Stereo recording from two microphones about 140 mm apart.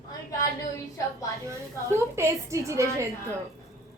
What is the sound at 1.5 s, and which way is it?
A woman's voice, 20° right (ahead or behind).